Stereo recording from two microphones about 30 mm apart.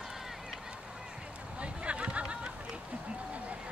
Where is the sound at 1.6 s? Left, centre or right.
Right.